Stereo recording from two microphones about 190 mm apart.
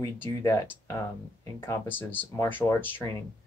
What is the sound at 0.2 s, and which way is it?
Speech, 15° left (ahead or behind).